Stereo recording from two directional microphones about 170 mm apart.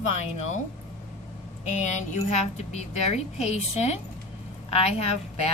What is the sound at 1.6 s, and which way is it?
A woman's voice, 45° left (ahead or behind).